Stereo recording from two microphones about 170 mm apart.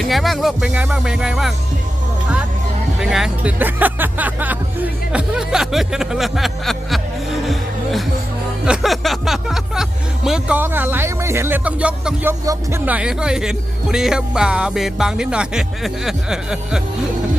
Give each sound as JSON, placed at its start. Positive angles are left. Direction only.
{"t": 0.0, "sound": "speech", "side_deg": 0}
{"t": 3.0, "sound": "speech", "side_deg": -5}
{"t": 7.4, "sound": "music", "side_deg": 0}
{"t": 10.2, "sound": "speech", "side_deg": -5}